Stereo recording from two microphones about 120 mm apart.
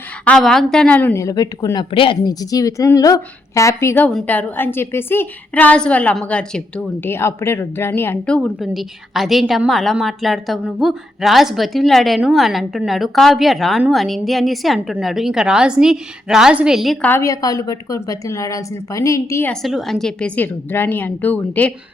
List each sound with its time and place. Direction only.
0.3 s a woman's voice: 5° left (ahead or behind)
1.1 s speech: 30° left (ahead or behind); by 2.3 s 45° left (ahead or behind)
2.4 s a woman's voice: 30° left (ahead or behind)
4.0 s a woman's voice: 10° left (ahead or behind)
8.6 s a woman's voice: centre (ahead or behind)
17.0 s a woman's voice: 20° left (ahead or behind)
19.6 s a woman's voice: centre (ahead or behind)